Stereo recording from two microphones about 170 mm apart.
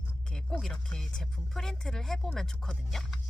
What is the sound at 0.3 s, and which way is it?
Speech, 5° left (ahead or behind).